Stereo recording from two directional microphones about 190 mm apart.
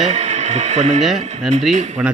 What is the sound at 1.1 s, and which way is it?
Speech, 35° right (ahead or behind).